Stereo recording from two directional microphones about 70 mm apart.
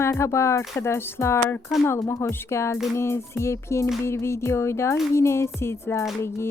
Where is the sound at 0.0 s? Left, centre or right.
Left.